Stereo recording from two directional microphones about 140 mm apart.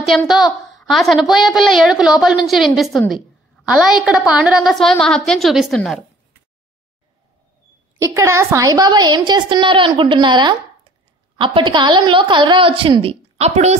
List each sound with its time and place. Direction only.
0.3 s a woman's voice: centre (ahead or behind)
8.0 s a woman's voice: 20° right (ahead or behind); by 13.7 s 50° right (ahead or behind)